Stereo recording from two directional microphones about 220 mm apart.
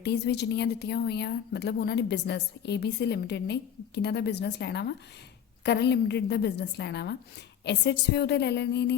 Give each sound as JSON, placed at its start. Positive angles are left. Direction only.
{"t": 0.0, "sound": "a woman's voice", "side_deg": 50}